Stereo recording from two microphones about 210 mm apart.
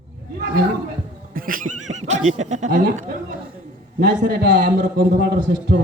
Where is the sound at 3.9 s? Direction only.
50° right (ahead or behind).